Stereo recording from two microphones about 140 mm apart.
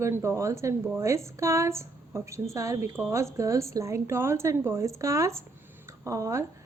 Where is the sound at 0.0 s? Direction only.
20° right (ahead or behind).